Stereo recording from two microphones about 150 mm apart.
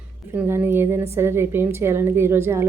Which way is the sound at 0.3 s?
15° right (ahead or behind).